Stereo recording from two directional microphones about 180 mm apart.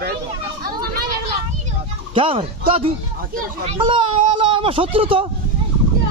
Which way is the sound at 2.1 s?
30° right (ahead or behind).